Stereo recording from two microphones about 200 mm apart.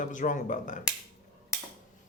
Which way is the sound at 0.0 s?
40° left (ahead or behind).